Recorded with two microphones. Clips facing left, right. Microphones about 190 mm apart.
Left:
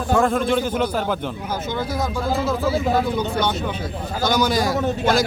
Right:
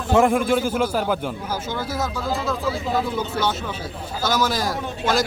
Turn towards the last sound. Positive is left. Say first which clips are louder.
# left 4 dB
turn(degrees=0)  # may be behind; listen again after turning